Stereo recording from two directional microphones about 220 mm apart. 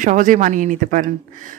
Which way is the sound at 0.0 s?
35° right (ahead or behind).